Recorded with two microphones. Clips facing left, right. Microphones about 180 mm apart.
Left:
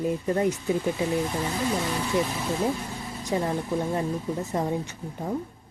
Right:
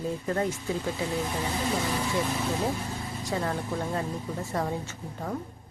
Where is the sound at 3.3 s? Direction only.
20° left (ahead or behind).